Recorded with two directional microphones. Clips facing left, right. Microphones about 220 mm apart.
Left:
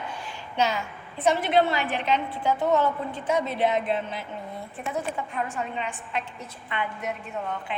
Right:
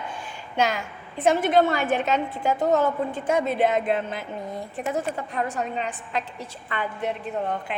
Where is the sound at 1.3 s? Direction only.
45° right (ahead or behind).